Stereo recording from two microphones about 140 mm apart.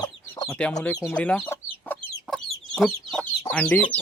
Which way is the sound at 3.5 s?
10° left (ahead or behind).